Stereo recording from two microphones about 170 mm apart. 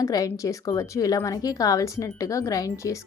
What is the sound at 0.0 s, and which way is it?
A woman's voice, 20° left (ahead or behind).